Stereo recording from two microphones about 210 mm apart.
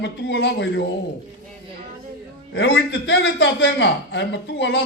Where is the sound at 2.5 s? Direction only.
55° left (ahead or behind).